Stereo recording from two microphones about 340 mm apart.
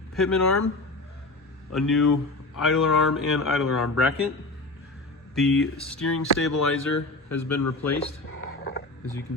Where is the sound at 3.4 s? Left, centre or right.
Centre.